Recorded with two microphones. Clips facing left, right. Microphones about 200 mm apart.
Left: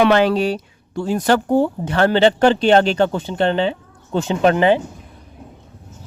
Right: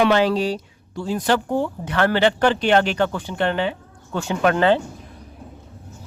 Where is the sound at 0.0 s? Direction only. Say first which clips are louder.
Left 3 dB; 60° left (ahead or behind); by 4.8 s 15° left (ahead or behind).